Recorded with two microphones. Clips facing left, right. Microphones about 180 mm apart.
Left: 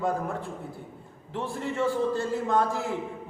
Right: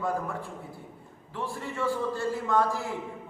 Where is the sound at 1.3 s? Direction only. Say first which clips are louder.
Left 4 dB; 20° left (ahead or behind).